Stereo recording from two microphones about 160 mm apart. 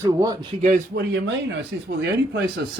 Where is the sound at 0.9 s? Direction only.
90° right.